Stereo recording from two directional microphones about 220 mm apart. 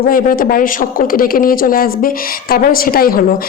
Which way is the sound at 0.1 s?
40° left (ahead or behind).